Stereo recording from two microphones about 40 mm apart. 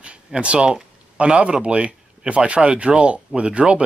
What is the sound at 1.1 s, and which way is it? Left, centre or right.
Speech, right.